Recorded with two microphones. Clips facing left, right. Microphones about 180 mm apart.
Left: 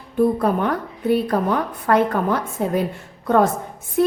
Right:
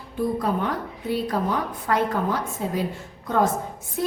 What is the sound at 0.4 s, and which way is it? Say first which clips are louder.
A woman's voice: left 5 dB; 55° left (ahead or behind).